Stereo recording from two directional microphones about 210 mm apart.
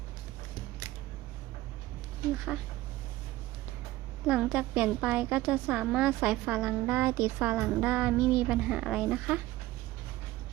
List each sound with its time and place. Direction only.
2.5 s speech: 5° right (ahead or behind)
4.3 s a woman's voice: 5° right (ahead or behind)